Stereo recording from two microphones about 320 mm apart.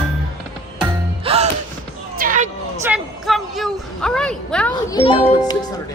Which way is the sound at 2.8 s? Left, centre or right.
Centre.